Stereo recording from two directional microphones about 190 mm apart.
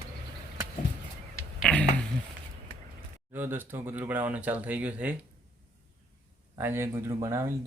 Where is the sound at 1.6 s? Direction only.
5° left (ahead or behind).